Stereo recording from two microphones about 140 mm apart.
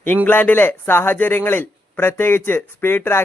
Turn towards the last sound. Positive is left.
turn(degrees=15)  # may be behind; listen again after turning